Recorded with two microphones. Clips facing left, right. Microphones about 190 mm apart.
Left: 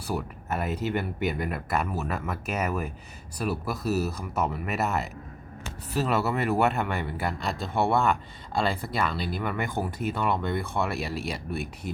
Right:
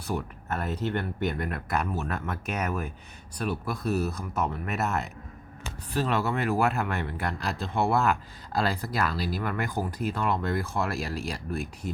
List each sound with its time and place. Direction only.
0.1 s speech: 5° left (ahead or behind)